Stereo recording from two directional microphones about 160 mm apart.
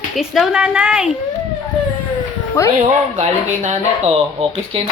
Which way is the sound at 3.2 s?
45° right (ahead or behind).